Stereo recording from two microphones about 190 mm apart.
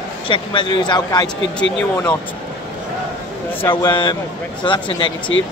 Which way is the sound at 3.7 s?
25° left (ahead or behind).